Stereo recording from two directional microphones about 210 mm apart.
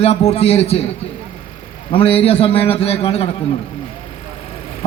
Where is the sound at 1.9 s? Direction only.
25° left (ahead or behind).